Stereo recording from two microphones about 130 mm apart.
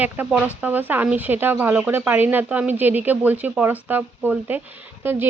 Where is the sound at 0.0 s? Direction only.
10° right (ahead or behind).